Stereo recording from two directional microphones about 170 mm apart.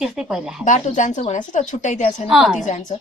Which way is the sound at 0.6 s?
45° left (ahead or behind).